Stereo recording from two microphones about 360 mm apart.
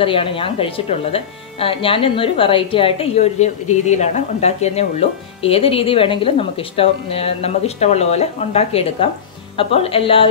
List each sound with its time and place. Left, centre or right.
0.0 s speech: centre